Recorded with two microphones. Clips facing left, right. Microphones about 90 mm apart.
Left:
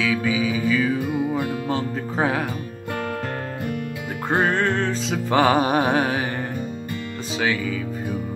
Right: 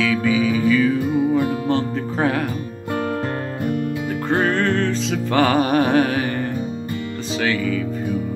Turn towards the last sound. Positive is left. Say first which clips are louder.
# right 2 dB
turn(degrees=15)  # may be behind; listen again after turning